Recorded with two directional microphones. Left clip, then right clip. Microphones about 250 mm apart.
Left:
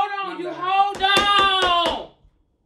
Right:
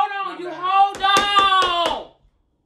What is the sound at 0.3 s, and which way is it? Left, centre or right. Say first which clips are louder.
Speech: left 1 dB; centre.